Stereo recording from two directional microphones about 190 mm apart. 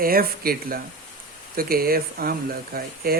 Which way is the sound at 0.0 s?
50° right (ahead or behind).